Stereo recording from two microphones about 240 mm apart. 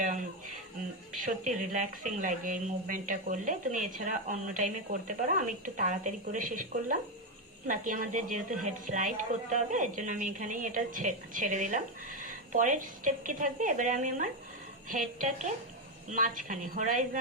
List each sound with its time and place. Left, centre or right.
0.0 s a woman's voice: right